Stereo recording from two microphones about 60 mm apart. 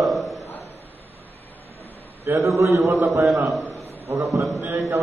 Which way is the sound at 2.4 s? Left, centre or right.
Right.